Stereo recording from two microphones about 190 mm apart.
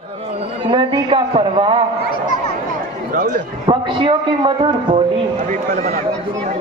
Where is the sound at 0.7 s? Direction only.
25° right (ahead or behind).